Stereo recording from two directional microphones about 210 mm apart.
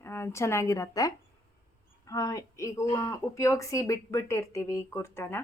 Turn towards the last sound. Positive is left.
turn(degrees=10)  # may be behind; listen again after turning